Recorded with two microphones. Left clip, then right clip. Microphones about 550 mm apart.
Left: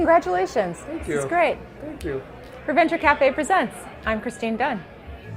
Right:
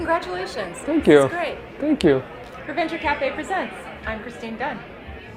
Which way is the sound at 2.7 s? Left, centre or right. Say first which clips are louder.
Left 5 dB; left.